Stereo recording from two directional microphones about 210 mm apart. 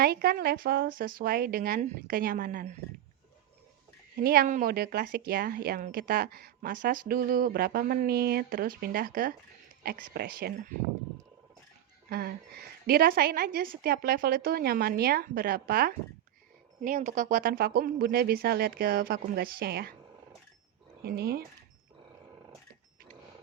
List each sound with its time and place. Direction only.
0.0 s speech: 45° right (ahead or behind)
4.2 s speech: 45° right (ahead or behind)
12.0 s speech: 45° right (ahead or behind)
21.0 s speech: 45° right (ahead or behind)